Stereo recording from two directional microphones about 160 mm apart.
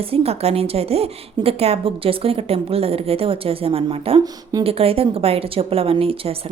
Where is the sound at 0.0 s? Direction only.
40° right (ahead or behind).